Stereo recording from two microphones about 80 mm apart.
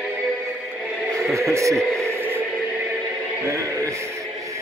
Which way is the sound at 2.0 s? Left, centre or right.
Right.